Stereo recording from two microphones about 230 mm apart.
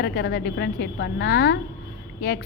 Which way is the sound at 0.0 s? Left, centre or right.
Left.